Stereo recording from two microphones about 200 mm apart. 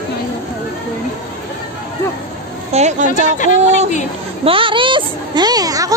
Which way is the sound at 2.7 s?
35° right (ahead or behind).